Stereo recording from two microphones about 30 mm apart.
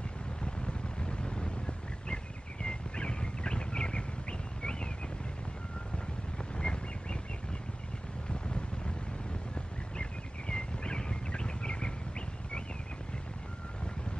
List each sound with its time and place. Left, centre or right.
0.4 s vehicle: left
2.6 s bird: left
6.3 s bird: left
8.3 s vehicle: left
9.9 s a sound: left